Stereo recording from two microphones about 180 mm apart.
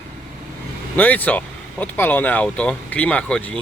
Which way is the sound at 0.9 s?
10° left (ahead or behind).